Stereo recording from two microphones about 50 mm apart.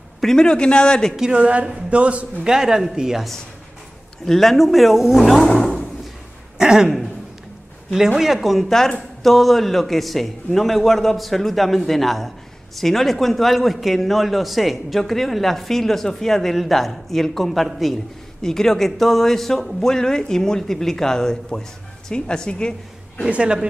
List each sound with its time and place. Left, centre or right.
0.2 s speech: centre
1.3 s speech: right
2.4 s speech: centre
4.3 s a man's voice: centre
6.6 s speech: centre
8.2 s a man's voice: centre
23.2 s speech: right